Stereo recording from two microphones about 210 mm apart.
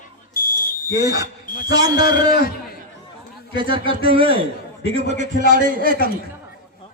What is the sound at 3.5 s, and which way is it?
A man's voice, 25° right (ahead or behind).